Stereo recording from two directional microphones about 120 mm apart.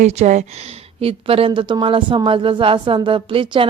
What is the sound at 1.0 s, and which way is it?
Speech, 55° right (ahead or behind).